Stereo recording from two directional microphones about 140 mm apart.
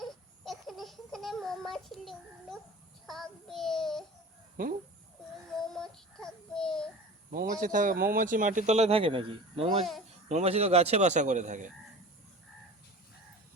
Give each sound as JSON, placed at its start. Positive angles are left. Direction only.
{"t": 0.0, "sound": "a sound", "side_deg": 0}
{"t": 3.1, "sound": "child singing", "side_deg": 0}
{"t": 4.6, "sound": "speech", "side_deg": -90}
{"t": 5.5, "sound": "child singing", "side_deg": 5}
{"t": 7.3, "sound": "a man's voice", "side_deg": -80}
{"t": 10.2, "sound": "a man's voice", "side_deg": -55}